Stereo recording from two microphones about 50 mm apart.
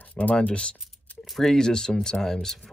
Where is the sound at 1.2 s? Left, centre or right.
Centre.